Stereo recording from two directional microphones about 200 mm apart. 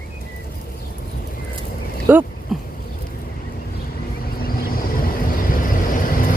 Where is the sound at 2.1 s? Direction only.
10° right (ahead or behind).